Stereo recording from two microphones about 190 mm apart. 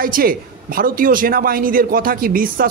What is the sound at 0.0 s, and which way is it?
A man's voice, 50° right (ahead or behind).